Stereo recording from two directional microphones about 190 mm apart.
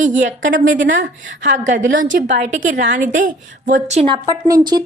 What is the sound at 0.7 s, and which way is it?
Speech, 75° right (ahead or behind).